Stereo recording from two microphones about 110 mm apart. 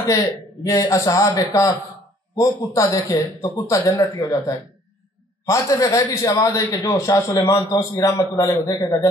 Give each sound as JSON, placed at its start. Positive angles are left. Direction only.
{"t": 0.7, "sound": "a man's voice", "side_deg": 30}